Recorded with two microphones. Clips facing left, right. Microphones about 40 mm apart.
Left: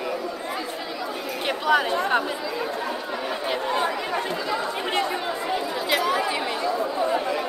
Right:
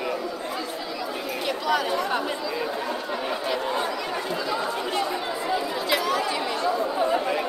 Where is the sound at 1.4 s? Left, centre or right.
Left.